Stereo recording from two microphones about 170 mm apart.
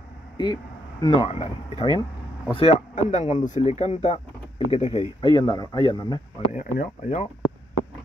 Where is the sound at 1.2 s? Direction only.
35° left (ahead or behind).